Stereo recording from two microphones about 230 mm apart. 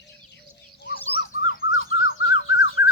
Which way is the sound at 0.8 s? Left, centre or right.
Left.